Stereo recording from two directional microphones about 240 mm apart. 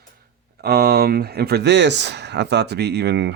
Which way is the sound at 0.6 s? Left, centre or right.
Right.